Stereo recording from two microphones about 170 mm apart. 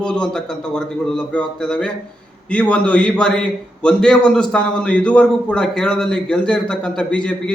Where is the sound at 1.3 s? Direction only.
5° left (ahead or behind).